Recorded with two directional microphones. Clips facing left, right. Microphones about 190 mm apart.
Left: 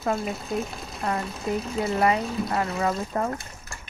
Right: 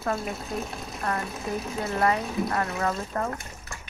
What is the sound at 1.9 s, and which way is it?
A woman's voice, 15° left (ahead or behind).